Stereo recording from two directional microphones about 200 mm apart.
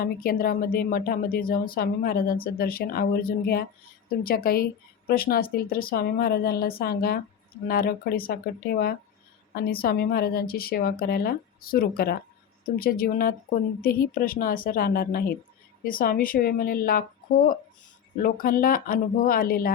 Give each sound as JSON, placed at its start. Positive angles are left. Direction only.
{"t": 0.0, "sound": "speech", "side_deg": 45}
{"t": 18.2, "sound": "speech", "side_deg": 45}